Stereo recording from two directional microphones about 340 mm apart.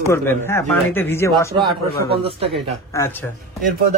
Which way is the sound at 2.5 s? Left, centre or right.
Centre.